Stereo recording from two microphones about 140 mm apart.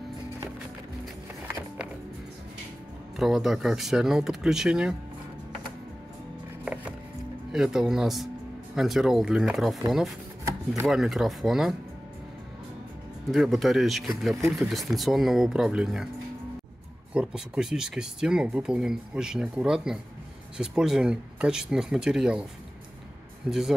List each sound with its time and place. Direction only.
3.2 s speech: centre (ahead or behind)
6.6 s music: 10° right (ahead or behind)
7.5 s speech: 5° right (ahead or behind)
10.9 s speech: centre (ahead or behind)
13.3 s speech: centre (ahead or behind)
17.1 s a man's voice: 5° right (ahead or behind)